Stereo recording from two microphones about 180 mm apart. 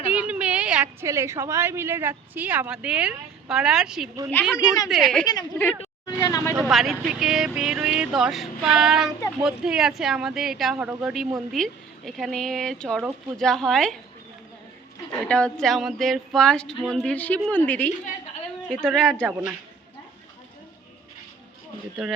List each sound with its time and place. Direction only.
0.1 s a sound: 5° right (ahead or behind)
1.0 s speech: 15° right (ahead or behind)
4.5 s a woman's voice: 20° left (ahead or behind)
4.9 s speech: centre (ahead or behind)
5.2 s a woman's voice: 25° left (ahead or behind)
6.7 s speech: centre (ahead or behind)
15.2 s speech: 5° left (ahead or behind)
22.0 s speech: centre (ahead or behind)